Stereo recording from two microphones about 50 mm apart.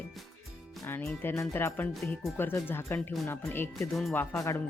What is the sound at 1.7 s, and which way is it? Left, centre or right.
Speech, left.